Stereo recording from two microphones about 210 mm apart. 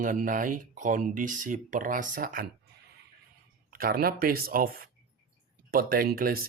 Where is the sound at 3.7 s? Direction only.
45° right (ahead or behind).